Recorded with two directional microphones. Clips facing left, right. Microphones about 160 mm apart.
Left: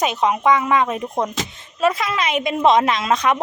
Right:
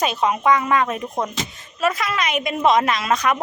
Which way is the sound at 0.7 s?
20° left (ahead or behind).